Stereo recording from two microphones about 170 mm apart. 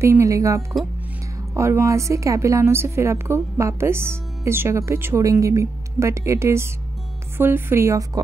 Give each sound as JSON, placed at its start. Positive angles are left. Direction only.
{"t": 0.0, "sound": "a woman's voice", "side_deg": -15}